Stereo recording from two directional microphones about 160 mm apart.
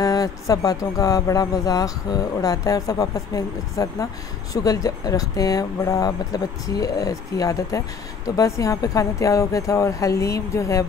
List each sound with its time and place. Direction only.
0.0 s speech: 20° left (ahead or behind)